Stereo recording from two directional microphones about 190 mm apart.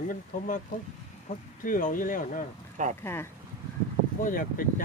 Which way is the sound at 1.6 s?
45° left (ahead or behind).